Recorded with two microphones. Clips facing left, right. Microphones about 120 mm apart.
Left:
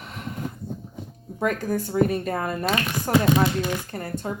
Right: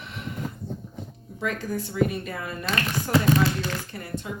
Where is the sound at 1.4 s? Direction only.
50° left (ahead or behind).